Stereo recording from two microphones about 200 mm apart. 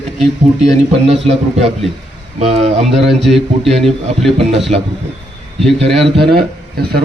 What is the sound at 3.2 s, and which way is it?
Speech, centre (ahead or behind).